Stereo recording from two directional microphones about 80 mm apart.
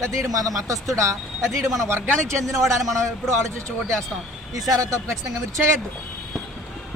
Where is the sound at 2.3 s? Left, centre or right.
Right.